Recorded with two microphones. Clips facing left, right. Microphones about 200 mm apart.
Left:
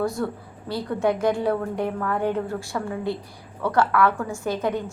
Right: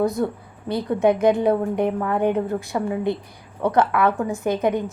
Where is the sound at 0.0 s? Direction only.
20° right (ahead or behind).